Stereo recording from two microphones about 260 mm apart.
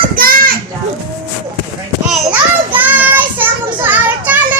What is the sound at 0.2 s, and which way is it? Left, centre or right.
Children playing, right.